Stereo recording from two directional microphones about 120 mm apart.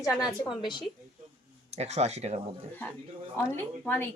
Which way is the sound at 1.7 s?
65° right (ahead or behind).